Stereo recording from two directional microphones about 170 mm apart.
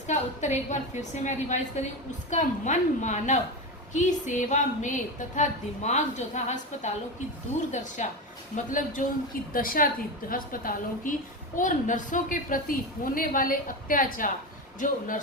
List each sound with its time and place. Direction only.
0.1 s a woman's voice: 45° left (ahead or behind)
8.5 s a woman's voice: 50° left (ahead or behind)